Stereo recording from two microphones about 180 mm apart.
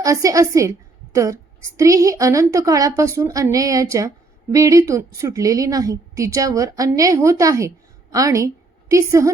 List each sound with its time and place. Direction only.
0.0 s a woman's voice: 20° right (ahead or behind)